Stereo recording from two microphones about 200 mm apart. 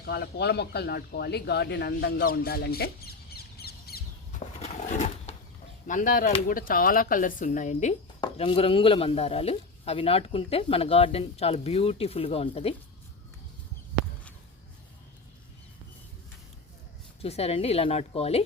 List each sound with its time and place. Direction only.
0.0 s speech: 55° left (ahead or behind)
4.6 s a sound: 35° left (ahead or behind)
5.9 s a woman's voice: 40° left (ahead or behind)
17.2 s a woman's voice: 30° left (ahead or behind)